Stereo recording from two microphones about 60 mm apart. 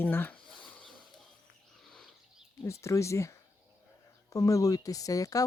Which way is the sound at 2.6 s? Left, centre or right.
Left.